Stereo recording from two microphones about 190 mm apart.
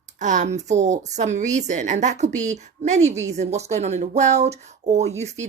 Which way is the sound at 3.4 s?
35° right (ahead or behind).